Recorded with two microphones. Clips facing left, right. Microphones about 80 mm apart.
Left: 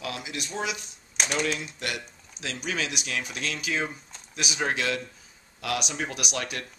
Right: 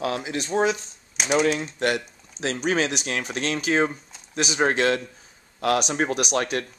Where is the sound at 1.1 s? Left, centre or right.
Centre.